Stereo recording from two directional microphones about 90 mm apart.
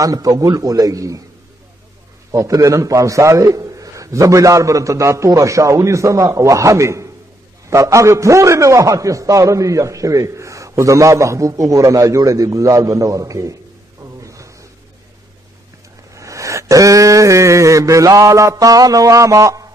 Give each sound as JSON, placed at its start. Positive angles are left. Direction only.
{"t": 0.0, "sound": "a man's voice", "side_deg": -40}
{"t": 2.3, "sound": "a man's voice", "side_deg": -35}
{"t": 14.2, "sound": "a sound", "side_deg": -35}
{"t": 16.2, "sound": "a man's voice", "side_deg": -35}